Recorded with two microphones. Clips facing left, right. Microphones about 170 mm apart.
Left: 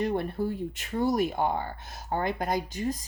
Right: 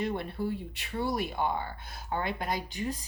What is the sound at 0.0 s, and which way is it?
Speech, 45° left (ahead or behind).